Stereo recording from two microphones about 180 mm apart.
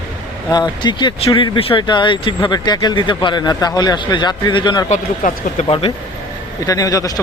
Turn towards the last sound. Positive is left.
turn(degrees=20)  # may be behind; listen again after turning